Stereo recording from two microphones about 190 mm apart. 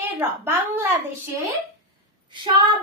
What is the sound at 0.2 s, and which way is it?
A woman's voice, 10° right (ahead or behind).